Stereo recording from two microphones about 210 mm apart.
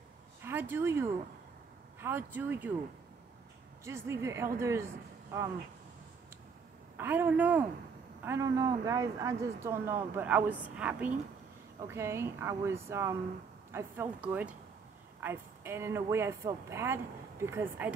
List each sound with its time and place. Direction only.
0.4 s speech: 10° right (ahead or behind)
3.8 s a man's voice: 15° right (ahead or behind)
7.0 s a woman's voice: 10° right (ahead or behind)